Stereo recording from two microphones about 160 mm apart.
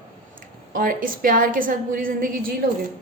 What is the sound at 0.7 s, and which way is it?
A woman's voice, 60° right (ahead or behind).